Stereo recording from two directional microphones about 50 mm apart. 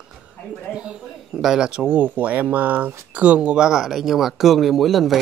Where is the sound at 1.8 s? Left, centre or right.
Right.